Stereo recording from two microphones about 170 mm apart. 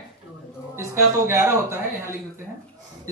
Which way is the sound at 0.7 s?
15° right (ahead or behind).